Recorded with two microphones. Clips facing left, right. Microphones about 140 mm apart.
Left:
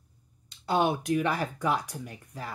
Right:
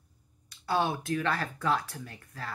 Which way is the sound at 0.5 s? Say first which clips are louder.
Left 3 dB; 20° left (ahead or behind).